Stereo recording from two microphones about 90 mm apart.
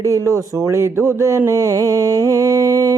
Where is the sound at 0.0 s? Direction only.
35° right (ahead or behind).